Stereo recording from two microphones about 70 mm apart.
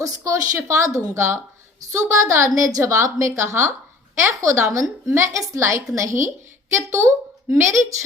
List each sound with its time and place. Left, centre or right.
0.0 s a woman's voice: right